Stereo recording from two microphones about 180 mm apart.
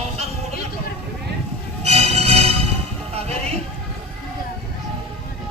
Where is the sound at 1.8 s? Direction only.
35° right (ahead or behind).